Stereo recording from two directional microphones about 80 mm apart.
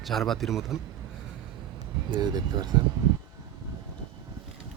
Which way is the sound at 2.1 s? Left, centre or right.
Right.